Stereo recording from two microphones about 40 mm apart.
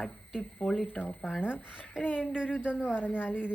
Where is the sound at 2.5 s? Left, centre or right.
Left.